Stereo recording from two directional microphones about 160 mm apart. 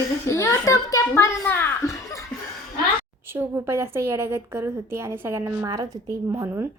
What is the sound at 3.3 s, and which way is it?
A woman's voice, 15° right (ahead or behind).